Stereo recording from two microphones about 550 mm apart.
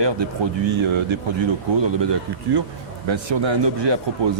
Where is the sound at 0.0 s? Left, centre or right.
Right.